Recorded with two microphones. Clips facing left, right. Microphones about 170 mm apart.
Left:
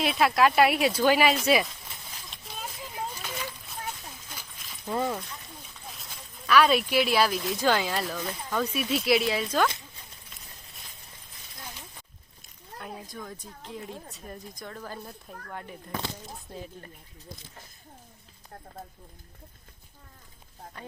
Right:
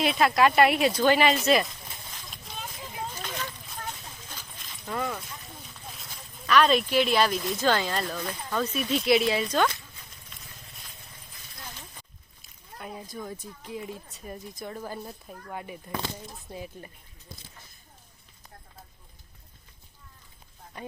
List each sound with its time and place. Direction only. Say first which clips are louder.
0.0 s speech: right 1 dB; centre (ahead or behind)
2.3 s a sound: left 1 dB; centre (ahead or behind)
4.9 s speech: left 3 dB; 25° left (ahead or behind)
6.0 s speech: right 1 dB; centre (ahead or behind)
7.6 s speech: even; 10° left (ahead or behind)
12.8 s speech: right 2 dB; 5° right (ahead or behind)
14.6 s speech: right 4 dB; 15° right (ahead or behind)